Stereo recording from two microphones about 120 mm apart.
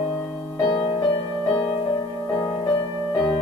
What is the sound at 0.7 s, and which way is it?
Music, 40° left (ahead or behind).